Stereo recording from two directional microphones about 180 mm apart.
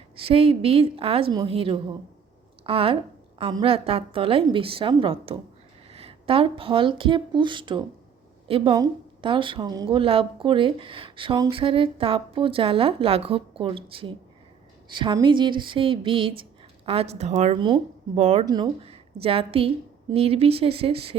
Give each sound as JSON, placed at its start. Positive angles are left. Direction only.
{"t": 0.3, "sound": "a woman's voice", "side_deg": -35}
{"t": 17.6, "sound": "speech", "side_deg": -25}
{"t": 18.2, "sound": "speech", "side_deg": -35}
{"t": 18.4, "sound": "a woman's voice", "side_deg": -25}